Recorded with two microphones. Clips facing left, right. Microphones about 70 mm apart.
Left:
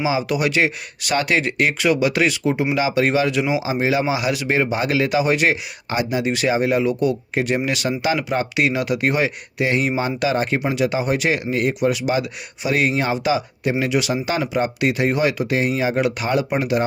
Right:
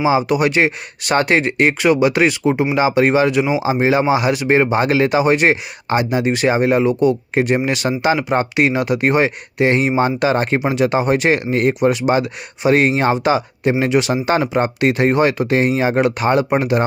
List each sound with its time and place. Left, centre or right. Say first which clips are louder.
0.0 s speech: right 5 dB; right